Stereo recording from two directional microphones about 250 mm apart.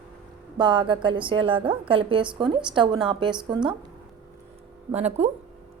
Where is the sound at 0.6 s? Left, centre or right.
Centre.